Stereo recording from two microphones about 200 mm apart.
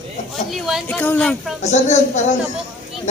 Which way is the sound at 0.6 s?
Centre (ahead or behind).